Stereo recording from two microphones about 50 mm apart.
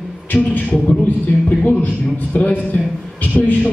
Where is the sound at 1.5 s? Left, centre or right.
Left.